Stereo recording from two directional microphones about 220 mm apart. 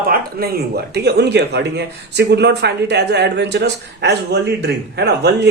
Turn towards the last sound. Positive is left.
turn(degrees=-50)  # may be behind; listen again after turning